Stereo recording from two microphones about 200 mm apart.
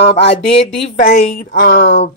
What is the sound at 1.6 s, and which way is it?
Speech, 60° left (ahead or behind).